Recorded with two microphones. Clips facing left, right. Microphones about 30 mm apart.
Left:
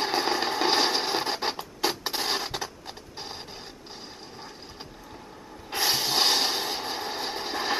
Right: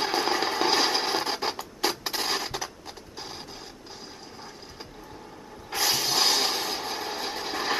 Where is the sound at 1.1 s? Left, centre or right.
Centre.